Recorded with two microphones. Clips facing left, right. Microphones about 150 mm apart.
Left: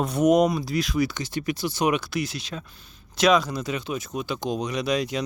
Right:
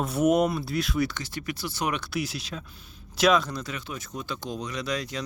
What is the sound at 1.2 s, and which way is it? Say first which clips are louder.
Speech: left 6 dB; 20° left (ahead or behind).